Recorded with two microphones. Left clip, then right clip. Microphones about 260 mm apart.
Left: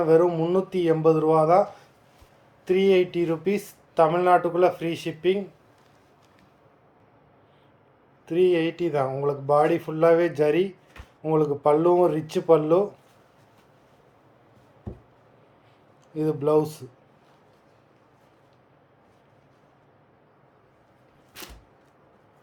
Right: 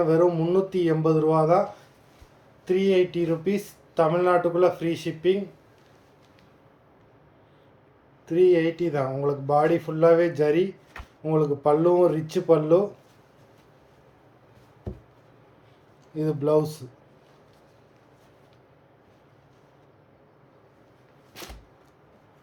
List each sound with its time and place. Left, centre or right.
0.0 s speech: centre
2.6 s speech: centre
8.3 s speech: centre
16.1 s speech: centre